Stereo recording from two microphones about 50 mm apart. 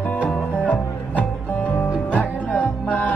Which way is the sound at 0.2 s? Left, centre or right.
Left.